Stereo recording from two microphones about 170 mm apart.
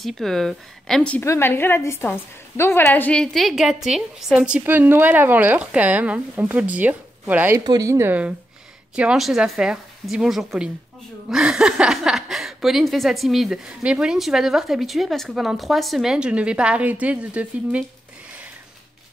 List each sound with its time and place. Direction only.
0.0 s a woman's voice: centre (ahead or behind)